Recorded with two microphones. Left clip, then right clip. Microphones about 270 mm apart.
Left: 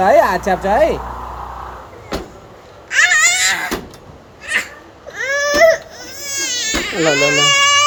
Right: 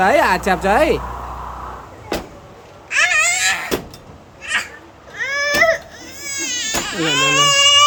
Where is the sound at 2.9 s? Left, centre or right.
Centre.